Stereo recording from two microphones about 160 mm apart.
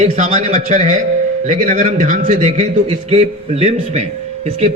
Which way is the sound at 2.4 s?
40° right (ahead or behind).